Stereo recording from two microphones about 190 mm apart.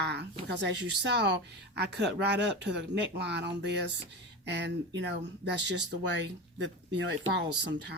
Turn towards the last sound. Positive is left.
turn(degrees=-65)  # may be behind; listen again after turning